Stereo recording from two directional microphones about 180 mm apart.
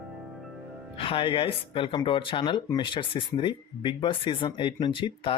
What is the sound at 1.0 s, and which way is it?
Speech, 30° left (ahead or behind).